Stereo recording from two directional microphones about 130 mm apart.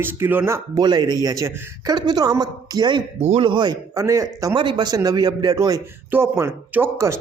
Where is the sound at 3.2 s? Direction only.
50° right (ahead or behind).